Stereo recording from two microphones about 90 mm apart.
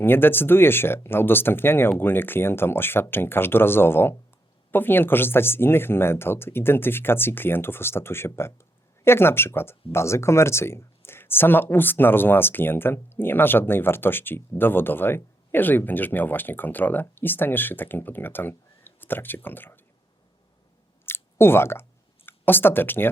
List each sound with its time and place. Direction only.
0.0 s speech: 25° left (ahead or behind)
21.0 s a sound: 25° left (ahead or behind)
22.3 s speech: 20° left (ahead or behind)